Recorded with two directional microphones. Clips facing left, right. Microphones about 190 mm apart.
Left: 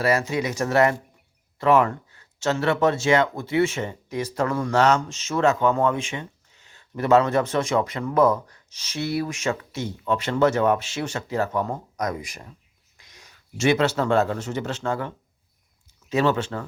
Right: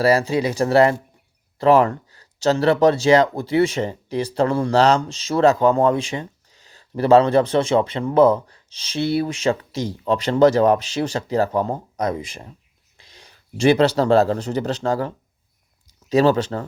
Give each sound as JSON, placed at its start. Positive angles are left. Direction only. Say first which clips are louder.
{"t": 0.0, "sound": "speech", "louder": "right 5 dB", "side_deg": -35}